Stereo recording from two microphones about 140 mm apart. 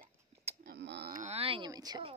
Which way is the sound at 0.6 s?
85° right.